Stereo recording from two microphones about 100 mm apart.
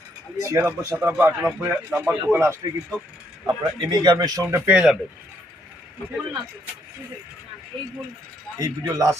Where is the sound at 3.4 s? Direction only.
45° right (ahead or behind).